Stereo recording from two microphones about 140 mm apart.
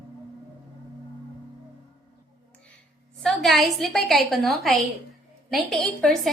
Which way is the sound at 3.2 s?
Centre (ahead or behind).